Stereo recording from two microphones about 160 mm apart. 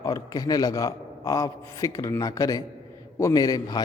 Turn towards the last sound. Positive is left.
turn(degrees=25)  # may be behind; listen again after turning